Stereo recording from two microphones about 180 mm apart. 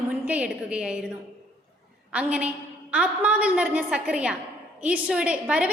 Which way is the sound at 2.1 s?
5° right (ahead or behind).